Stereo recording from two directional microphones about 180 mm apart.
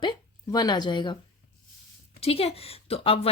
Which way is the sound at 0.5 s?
25° left (ahead or behind).